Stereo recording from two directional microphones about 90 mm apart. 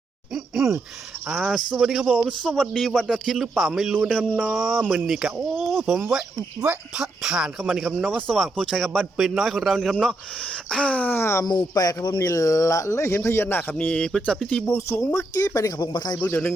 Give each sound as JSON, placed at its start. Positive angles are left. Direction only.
{"t": 0.3, "sound": "a sound", "side_deg": 0}
{"t": 1.3, "sound": "a man's voice", "side_deg": -5}
{"t": 8.0, "sound": "a man's voice", "side_deg": 5}
{"t": 11.4, "sound": "speech", "side_deg": 45}
{"t": 13.7, "sound": "speech", "side_deg": 10}
{"t": 14.7, "sound": "speech", "side_deg": 30}
{"t": 15.8, "sound": "speech", "side_deg": 55}
{"t": 16.1, "sound": "speech", "side_deg": 25}